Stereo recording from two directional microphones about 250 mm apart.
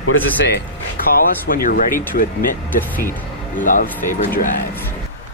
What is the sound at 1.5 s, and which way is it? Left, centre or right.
Speech, left.